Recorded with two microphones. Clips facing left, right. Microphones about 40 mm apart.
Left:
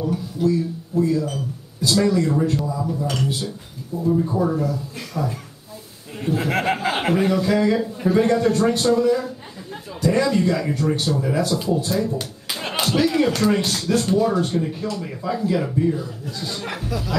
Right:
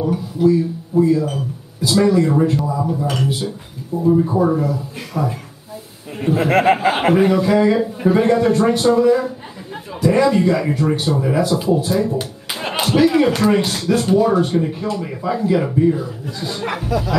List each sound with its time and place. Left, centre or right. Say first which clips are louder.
0.0 s speech: right 5 dB; centre